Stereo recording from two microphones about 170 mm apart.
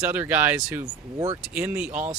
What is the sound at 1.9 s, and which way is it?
Speech, 45° right (ahead or behind).